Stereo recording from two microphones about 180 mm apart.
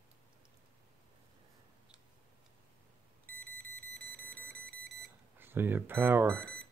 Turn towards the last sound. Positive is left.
turn(degrees=-10)  # may be behind; listen again after turning